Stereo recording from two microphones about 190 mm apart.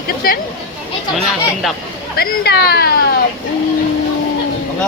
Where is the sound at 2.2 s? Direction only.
55° left (ahead or behind).